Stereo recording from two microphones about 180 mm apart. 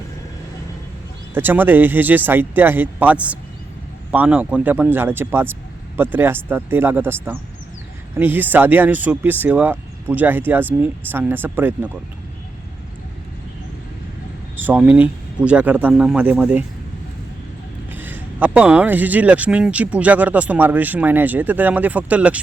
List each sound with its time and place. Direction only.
1.3 s speech: 10° right (ahead or behind)
14.5 s speech: 10° right (ahead or behind)
17.9 s speech: 10° right (ahead or behind)